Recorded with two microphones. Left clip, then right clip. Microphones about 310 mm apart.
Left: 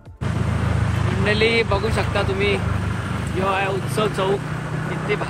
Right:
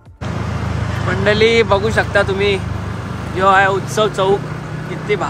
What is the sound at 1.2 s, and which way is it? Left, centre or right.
Speech, right.